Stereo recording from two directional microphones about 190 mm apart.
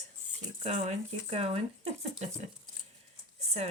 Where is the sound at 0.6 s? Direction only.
35° right (ahead or behind).